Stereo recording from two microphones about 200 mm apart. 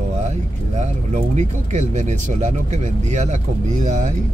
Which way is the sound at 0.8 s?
35° right (ahead or behind).